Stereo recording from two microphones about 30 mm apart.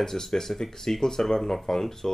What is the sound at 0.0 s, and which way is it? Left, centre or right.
Speech, centre.